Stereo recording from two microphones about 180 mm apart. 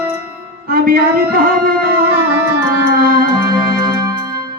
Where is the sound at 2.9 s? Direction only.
55° right (ahead or behind).